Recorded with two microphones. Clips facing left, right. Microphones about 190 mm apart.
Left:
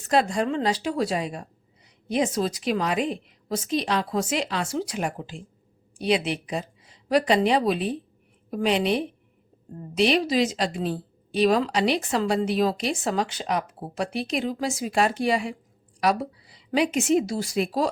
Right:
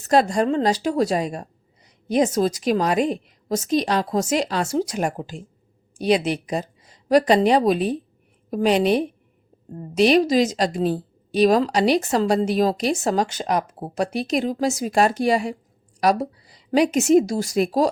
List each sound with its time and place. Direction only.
0.0 s a woman's voice: 40° right (ahead or behind)